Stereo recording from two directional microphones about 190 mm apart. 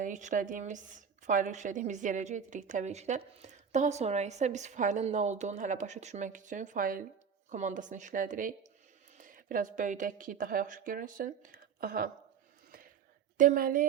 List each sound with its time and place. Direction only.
0.0 s a woman's voice: 40° right (ahead or behind)
13.3 s a woman's voice: 45° right (ahead or behind)